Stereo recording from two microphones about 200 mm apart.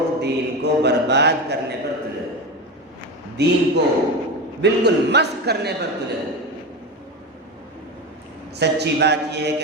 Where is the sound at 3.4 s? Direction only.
55° right (ahead or behind).